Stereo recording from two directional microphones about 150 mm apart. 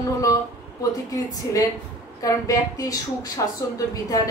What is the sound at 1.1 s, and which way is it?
Speech, 25° left (ahead or behind).